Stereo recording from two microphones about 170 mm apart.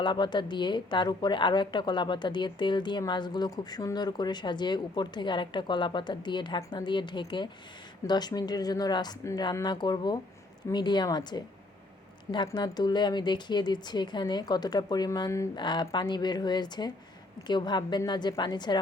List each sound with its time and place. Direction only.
0.0 s speech: 25° left (ahead or behind)